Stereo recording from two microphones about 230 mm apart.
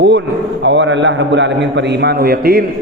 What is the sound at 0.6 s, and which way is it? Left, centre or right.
A man's voice, right.